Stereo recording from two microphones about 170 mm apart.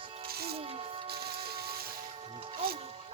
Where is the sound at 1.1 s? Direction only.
65° right (ahead or behind).